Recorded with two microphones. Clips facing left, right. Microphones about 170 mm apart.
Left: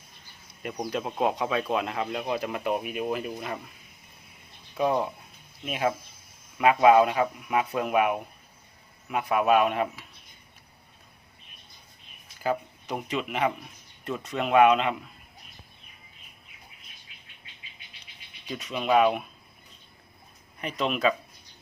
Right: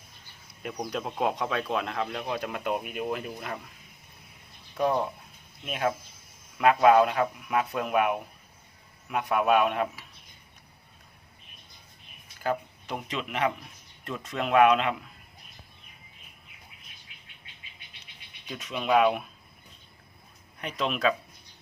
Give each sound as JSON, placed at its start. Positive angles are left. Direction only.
{"t": 0.6, "sound": "speech", "side_deg": 5}
{"t": 4.8, "sound": "speech", "side_deg": 5}
{"t": 12.4, "sound": "speech", "side_deg": 5}
{"t": 18.4, "sound": "speech", "side_deg": 0}
{"t": 20.6, "sound": "speech", "side_deg": 0}